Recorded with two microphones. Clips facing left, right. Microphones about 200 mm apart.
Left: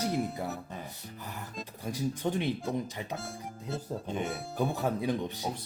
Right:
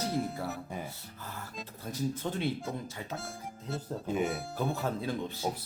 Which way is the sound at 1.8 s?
15° left (ahead or behind).